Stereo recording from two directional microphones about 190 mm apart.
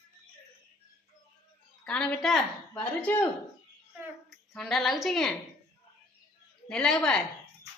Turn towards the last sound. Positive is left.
turn(degrees=5)  # may be behind; listen again after turning